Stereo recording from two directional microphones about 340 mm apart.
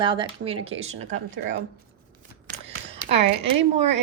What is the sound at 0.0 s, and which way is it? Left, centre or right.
Speech, centre.